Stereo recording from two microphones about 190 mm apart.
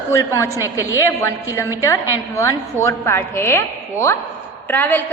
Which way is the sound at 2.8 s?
15° left (ahead or behind).